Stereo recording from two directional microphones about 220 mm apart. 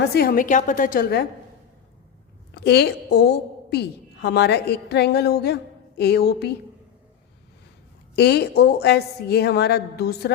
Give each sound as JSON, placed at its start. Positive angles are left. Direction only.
{"t": 0.1, "sound": "a woman's voice", "side_deg": 45}
{"t": 2.6, "sound": "a woman's voice", "side_deg": 50}
{"t": 8.1, "sound": "a woman's voice", "side_deg": 50}